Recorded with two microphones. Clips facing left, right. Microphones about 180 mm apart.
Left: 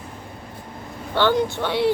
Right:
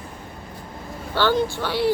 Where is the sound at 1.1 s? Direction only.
20° left (ahead or behind).